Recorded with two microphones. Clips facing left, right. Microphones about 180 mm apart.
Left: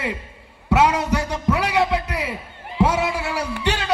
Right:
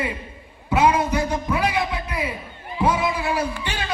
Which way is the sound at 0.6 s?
80° left.